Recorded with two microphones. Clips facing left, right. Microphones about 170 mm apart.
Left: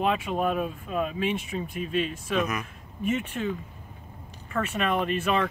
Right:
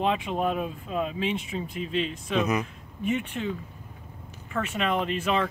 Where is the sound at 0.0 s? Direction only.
20° right (ahead or behind).